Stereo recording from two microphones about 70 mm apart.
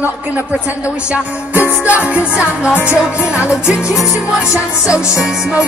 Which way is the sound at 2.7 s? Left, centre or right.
Left.